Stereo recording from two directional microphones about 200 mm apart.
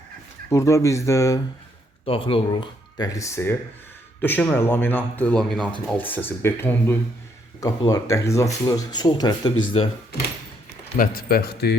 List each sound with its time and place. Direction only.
0.5 s speech: 15° left (ahead or behind)
2.0 s speech: 25° left (ahead or behind)
10.9 s speech: 45° left (ahead or behind)